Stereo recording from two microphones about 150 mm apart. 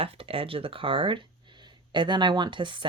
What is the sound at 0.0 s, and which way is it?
Speech, 40° right (ahead or behind).